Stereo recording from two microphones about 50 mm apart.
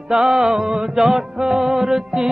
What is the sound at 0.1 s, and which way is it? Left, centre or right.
Music, centre.